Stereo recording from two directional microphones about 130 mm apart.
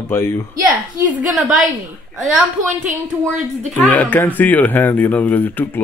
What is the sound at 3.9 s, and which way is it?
A man's voice, 15° left (ahead or behind).